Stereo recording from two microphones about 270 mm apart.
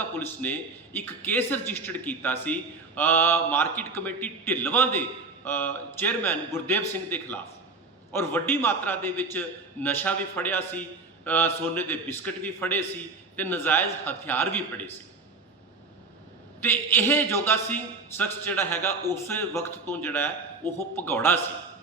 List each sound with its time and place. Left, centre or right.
0.2 s a man's voice: centre
16.6 s a man's voice: centre